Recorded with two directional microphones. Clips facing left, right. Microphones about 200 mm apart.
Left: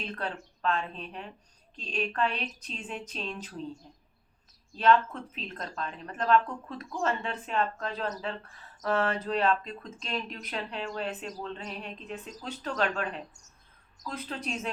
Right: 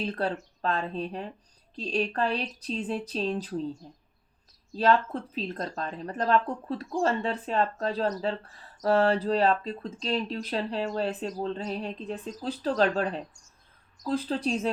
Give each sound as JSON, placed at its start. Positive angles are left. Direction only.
{"t": 0.0, "sound": "speech", "side_deg": -35}